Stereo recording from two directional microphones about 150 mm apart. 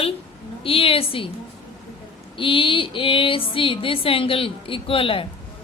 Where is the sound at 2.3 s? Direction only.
35° left (ahead or behind).